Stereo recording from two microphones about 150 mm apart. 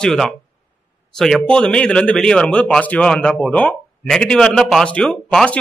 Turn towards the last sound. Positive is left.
turn(degrees=5)  # may be behind; listen again after turning